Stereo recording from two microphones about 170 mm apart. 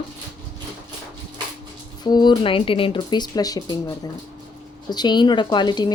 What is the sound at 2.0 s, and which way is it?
Speech, 25° left (ahead or behind).